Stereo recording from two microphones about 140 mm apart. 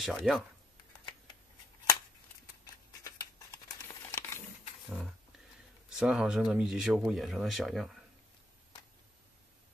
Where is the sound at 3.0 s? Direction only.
20° left (ahead or behind).